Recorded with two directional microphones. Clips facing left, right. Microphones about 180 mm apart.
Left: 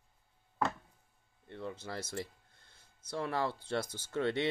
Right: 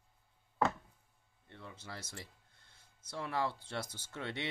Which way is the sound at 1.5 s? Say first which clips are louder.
Left 10 dB; 35° left (ahead or behind).